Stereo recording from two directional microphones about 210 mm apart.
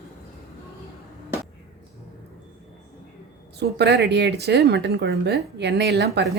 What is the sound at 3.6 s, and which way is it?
A woman's voice, 55° right (ahead or behind).